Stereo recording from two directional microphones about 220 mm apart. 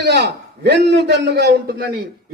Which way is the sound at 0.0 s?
50° right (ahead or behind).